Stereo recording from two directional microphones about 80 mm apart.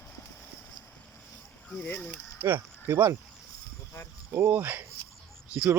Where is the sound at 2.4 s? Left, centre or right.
Right.